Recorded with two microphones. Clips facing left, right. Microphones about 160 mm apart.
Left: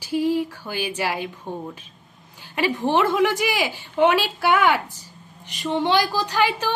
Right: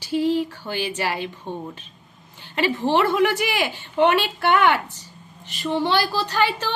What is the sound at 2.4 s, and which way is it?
A woman's voice, 15° left (ahead or behind).